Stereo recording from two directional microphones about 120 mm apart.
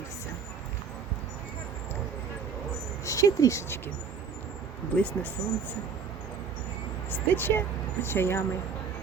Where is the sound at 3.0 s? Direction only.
25° left (ahead or behind).